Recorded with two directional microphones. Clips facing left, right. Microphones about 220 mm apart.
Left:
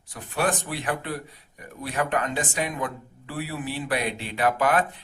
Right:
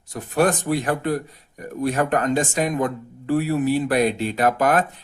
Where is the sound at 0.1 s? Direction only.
40° right (ahead or behind).